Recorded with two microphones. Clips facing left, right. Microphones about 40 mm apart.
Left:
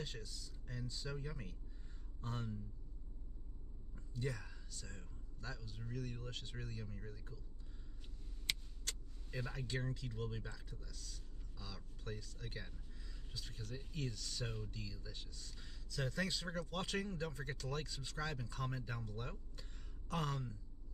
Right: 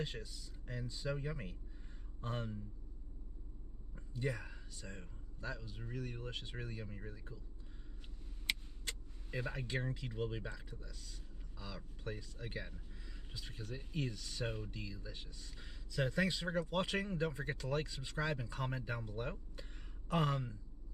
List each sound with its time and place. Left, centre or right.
0.0 s speech: centre
3.9 s speech: centre
8.5 s speech: centre